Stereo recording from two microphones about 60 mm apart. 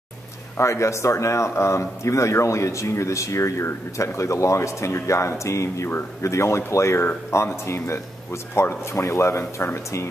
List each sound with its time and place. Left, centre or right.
0.6 s speech: left